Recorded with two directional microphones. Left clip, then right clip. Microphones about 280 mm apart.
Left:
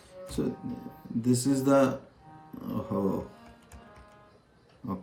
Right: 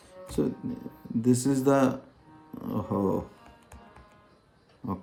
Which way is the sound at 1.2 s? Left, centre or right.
Right.